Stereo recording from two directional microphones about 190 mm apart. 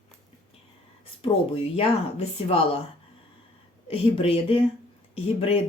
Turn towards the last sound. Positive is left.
turn(degrees=30)  # may be behind; listen again after turning